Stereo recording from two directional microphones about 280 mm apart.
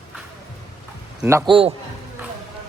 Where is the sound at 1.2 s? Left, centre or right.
Centre.